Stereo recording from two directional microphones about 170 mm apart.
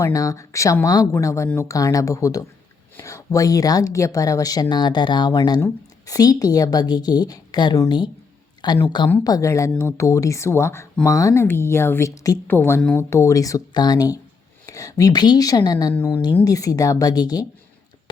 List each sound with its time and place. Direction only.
0.0 s a woman's voice: 20° left (ahead or behind)